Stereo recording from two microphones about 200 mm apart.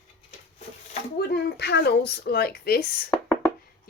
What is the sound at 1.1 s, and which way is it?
Speech, 55° left (ahead or behind).